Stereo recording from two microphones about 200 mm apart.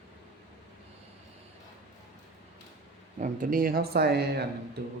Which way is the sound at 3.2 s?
40° right (ahead or behind).